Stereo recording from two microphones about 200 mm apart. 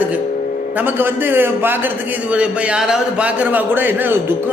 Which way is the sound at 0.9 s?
10° right (ahead or behind).